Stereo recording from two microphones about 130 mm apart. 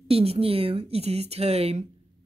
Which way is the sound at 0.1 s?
50° right (ahead or behind).